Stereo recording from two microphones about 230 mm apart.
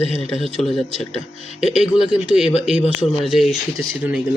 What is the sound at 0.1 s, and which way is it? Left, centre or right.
Speech, left.